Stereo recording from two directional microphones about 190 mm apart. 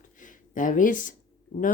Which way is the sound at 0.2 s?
45° left (ahead or behind).